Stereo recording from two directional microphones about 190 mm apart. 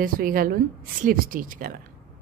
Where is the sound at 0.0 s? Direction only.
50° right (ahead or behind).